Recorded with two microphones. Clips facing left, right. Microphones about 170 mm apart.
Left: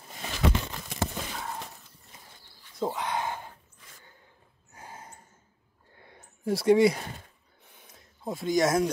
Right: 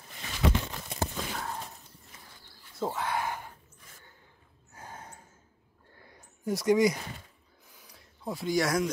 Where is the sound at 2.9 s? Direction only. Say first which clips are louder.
Left 1 dB; 20° left (ahead or behind).